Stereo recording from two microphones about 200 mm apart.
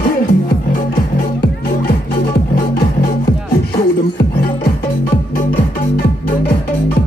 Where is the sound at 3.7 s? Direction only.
50° left (ahead or behind).